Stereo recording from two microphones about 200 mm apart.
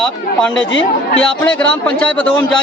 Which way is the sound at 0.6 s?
70° left (ahead or behind).